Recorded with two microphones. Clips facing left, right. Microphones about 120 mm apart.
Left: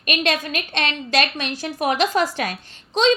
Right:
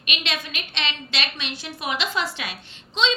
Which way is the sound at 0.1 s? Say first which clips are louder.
Left 8 dB; 45° left (ahead or behind).